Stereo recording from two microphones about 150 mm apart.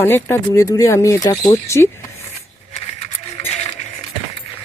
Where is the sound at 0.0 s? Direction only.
15° left (ahead or behind).